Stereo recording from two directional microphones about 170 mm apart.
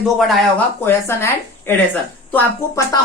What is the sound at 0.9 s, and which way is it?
Speech, 15° left (ahead or behind).